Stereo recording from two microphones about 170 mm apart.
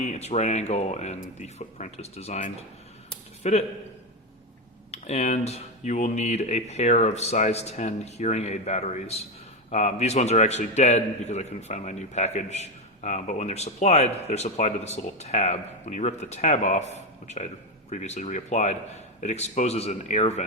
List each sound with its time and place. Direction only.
0.0 s a man's voice: 40° left (ahead or behind)
4.9 s a man's voice: 40° left (ahead or behind)